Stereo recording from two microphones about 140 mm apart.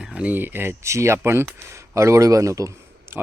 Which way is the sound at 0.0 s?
5° right (ahead or behind).